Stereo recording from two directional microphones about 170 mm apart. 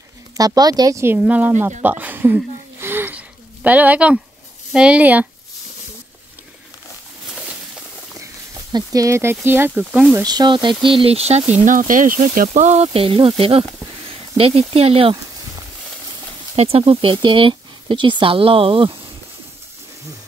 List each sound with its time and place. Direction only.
0.4 s speech: 20° right (ahead or behind)
1.8 s a sound: 10° right (ahead or behind)
4.7 s speech: 5° right (ahead or behind)
8.7 s speech: 20° right (ahead or behind)
10.2 s speech: 25° right (ahead or behind)
11.5 s speech: 50° right (ahead or behind); by 15.1 s 35° right (ahead or behind)
16.5 s speech: 35° right (ahead or behind)